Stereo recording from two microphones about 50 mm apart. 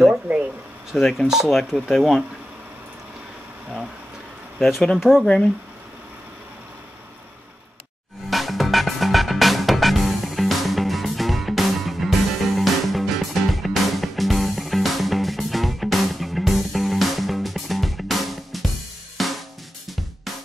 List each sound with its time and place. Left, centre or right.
0.1 s a sound: right
0.9 s speech: centre
4.6 s speech: centre
8.3 s music: centre
19.1 s drum kit: centre